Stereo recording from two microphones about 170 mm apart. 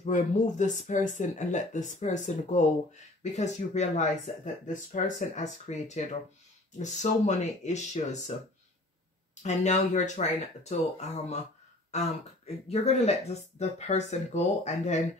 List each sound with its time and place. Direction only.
0.0 s speech: 45° left (ahead or behind)
9.4 s speech: 40° left (ahead or behind)